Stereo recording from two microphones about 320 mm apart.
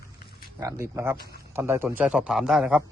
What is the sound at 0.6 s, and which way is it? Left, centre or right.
A man's voice, centre.